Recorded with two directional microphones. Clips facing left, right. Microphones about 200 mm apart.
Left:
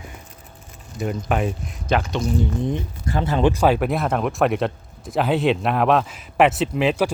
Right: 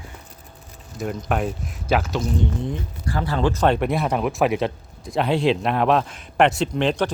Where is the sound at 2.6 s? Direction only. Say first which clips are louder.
Left 3 dB; 20° left (ahead or behind).